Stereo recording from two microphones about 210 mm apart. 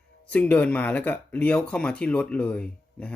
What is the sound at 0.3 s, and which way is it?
Speech, 5° left (ahead or behind).